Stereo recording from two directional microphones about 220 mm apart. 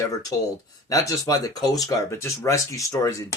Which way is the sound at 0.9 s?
15° left (ahead or behind).